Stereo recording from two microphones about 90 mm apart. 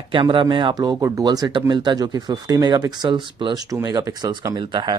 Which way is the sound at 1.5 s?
60° right (ahead or behind).